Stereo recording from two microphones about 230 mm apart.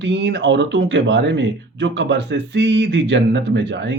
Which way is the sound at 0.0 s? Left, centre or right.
Right.